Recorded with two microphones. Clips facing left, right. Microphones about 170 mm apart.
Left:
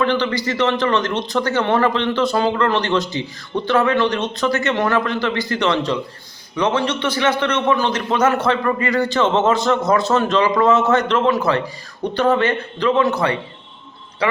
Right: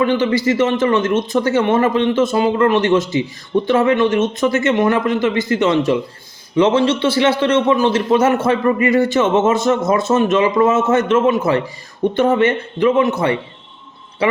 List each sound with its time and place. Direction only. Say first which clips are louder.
0.0 s a man's voice: right 4 dB; 25° right (ahead or behind)